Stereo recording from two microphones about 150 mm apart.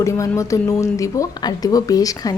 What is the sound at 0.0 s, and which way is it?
Speech, 20° left (ahead or behind).